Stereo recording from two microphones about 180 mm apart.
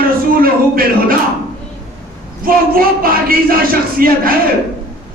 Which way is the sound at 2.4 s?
55° right (ahead or behind).